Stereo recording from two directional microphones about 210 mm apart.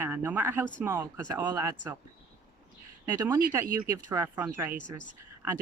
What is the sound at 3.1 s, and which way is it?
Speech, 10° right (ahead or behind).